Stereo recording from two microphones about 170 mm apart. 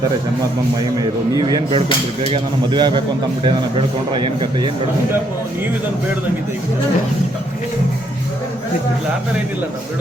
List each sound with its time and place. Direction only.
0.8 s a man's voice: 20° right (ahead or behind)